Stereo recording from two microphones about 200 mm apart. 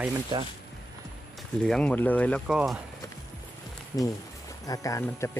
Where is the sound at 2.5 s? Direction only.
5° right (ahead or behind).